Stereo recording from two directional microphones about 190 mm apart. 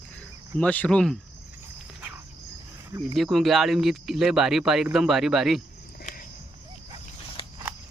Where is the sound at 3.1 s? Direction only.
Centre (ahead or behind).